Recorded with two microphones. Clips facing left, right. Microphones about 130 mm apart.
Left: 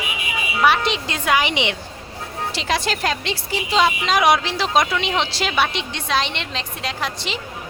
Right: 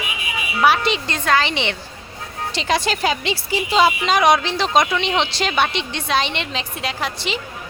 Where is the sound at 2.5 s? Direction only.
Centre (ahead or behind).